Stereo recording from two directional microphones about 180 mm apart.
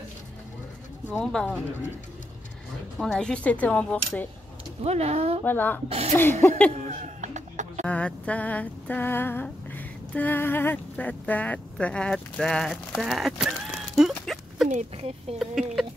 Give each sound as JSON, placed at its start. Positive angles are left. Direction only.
{"t": 1.1, "sound": "speech", "side_deg": 5}
{"t": 3.0, "sound": "speech", "side_deg": 5}
{"t": 4.8, "sound": "speech", "side_deg": -35}
{"t": 5.4, "sound": "speech", "side_deg": 10}
{"t": 5.9, "sound": "speech", "side_deg": -35}
{"t": 7.8, "sound": "a sound", "side_deg": 5}
{"t": 14.7, "sound": "speech", "side_deg": -40}
{"t": 15.3, "sound": "speech", "side_deg": 0}